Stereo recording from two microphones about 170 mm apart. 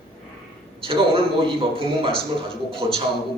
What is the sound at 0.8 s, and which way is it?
A man's voice, 30° right (ahead or behind).